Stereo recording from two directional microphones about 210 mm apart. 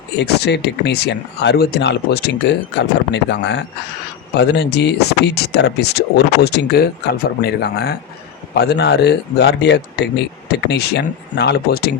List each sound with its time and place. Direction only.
0.2 s speech: 55° left (ahead or behind)